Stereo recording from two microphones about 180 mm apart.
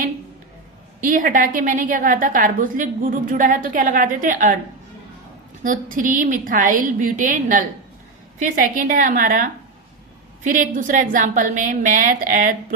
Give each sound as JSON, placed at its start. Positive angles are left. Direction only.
{"t": 1.0, "sound": "a woman's voice", "side_deg": -50}
{"t": 5.6, "sound": "a woman's voice", "side_deg": -45}